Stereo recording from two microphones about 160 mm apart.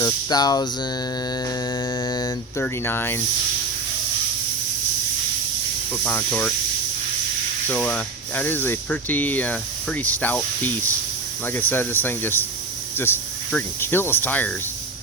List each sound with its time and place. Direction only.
0.0 s a sound: 25° left (ahead or behind)
2.0 s mantra: 25° left (ahead or behind)
2.8 s speech: 15° left (ahead or behind)
6.1 s speech: 10° left (ahead or behind)
7.7 s speech: 10° left (ahead or behind)